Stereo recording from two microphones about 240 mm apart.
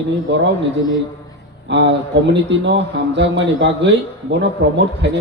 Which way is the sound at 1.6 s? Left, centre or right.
Right.